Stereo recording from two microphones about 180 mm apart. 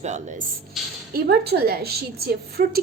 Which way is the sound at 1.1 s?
60° right (ahead or behind).